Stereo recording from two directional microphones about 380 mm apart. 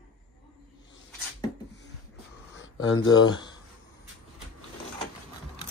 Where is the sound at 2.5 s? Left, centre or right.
Left.